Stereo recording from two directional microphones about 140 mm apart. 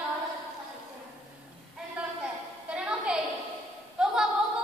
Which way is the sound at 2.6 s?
10° right (ahead or behind).